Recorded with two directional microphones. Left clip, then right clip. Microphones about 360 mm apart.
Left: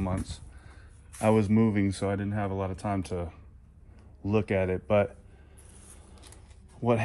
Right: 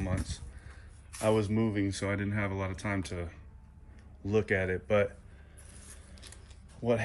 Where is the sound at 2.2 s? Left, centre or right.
Centre.